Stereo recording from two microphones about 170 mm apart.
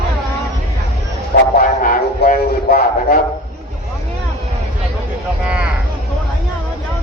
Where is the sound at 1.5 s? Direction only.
55° left (ahead or behind).